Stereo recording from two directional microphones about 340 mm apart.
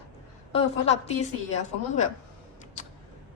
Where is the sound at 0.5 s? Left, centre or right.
Centre.